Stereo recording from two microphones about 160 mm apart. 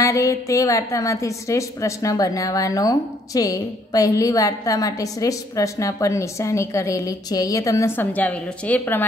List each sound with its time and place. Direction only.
0.0 s a woman's voice: 20° left (ahead or behind)